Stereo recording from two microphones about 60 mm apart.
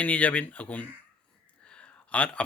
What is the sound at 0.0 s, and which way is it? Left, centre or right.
Speech, left.